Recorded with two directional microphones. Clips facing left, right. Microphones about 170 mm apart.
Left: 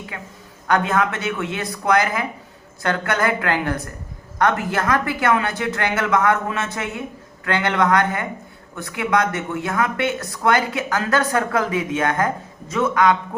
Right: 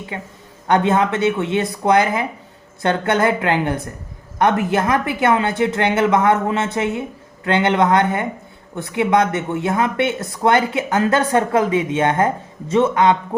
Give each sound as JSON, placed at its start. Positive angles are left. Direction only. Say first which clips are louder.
{"t": 0.1, "sound": "speech", "louder": "right 5 dB", "side_deg": -25}